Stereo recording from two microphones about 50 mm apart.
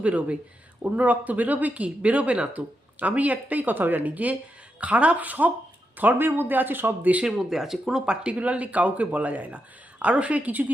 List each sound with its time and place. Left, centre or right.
0.0 s speech: right
7.3 s speech: centre
8.0 s speech: centre